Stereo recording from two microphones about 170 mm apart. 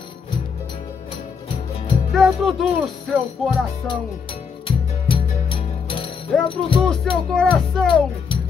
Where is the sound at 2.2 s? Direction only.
Centre (ahead or behind).